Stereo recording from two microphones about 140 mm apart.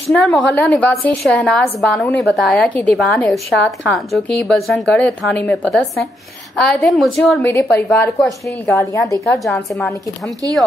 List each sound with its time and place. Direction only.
0.1 s a woman's voice: 10° left (ahead or behind)
7.4 s a woman's voice: 15° left (ahead or behind)
9.4 s a woman's voice: centre (ahead or behind)